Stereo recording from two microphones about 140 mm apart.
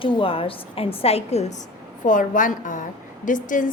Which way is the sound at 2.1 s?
70° left (ahead or behind).